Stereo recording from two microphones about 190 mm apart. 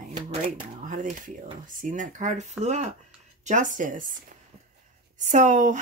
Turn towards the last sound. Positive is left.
turn(degrees=-40)  # may be behind; listen again after turning